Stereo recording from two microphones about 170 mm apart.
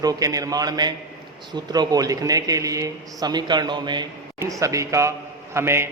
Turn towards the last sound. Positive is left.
turn(degrees=-15)  # may be behind; listen again after turning